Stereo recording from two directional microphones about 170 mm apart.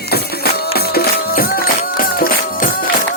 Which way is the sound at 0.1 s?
65° left (ahead or behind).